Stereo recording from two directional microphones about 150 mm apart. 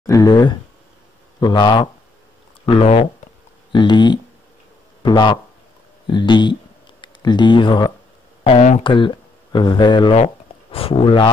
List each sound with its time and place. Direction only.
0.0 s speech: 25° left (ahead or behind)
8.5 s speech: 45° left (ahead or behind)
8.8 s speech: 35° left (ahead or behind)